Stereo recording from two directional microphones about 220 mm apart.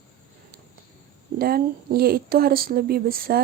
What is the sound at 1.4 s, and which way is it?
Speech, 45° right (ahead or behind).